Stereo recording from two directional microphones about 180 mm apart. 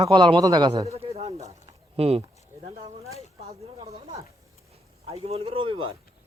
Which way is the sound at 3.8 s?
30° right (ahead or behind).